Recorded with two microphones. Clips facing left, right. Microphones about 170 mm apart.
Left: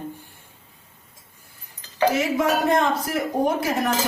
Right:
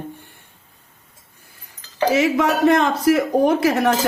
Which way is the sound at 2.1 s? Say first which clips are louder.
Right 6 dB; 75° right (ahead or behind).